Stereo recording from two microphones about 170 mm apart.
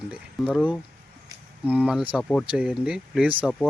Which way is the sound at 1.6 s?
10° right (ahead or behind).